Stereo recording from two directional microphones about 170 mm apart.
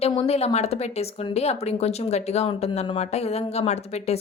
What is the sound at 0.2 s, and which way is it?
Speech, 35° left (ahead or behind).